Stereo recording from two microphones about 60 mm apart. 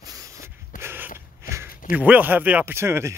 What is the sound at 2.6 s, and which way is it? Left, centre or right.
Speech, right.